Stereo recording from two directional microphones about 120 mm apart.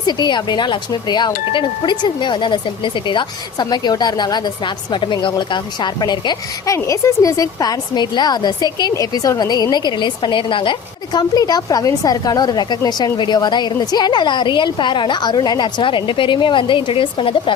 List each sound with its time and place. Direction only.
0.0 s a woman's voice: 35° left (ahead or behind)
6.7 s a woman's voice: 25° left (ahead or behind); by 17.5 s 45° left (ahead or behind)